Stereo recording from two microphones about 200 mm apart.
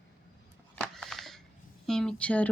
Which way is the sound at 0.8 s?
Centre (ahead or behind).